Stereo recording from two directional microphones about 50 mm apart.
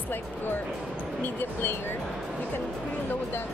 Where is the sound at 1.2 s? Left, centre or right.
Left.